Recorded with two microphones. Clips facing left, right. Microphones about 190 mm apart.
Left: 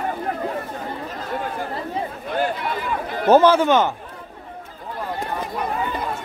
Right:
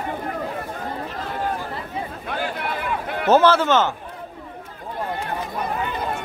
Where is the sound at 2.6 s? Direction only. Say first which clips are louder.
Left 1 dB; 60° right (ahead or behind).